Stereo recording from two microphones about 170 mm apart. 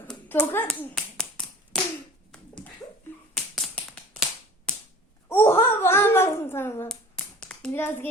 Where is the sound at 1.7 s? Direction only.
5° left (ahead or behind).